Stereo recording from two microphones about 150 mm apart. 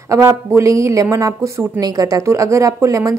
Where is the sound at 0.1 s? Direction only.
20° right (ahead or behind).